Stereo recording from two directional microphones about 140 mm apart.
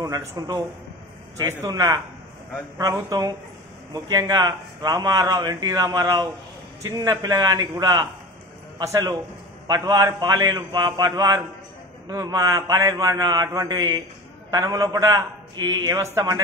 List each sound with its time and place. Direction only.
0.0 s a man's voice: 25° right (ahead or behind)